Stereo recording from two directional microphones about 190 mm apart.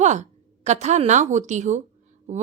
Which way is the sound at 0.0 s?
40° right (ahead or behind).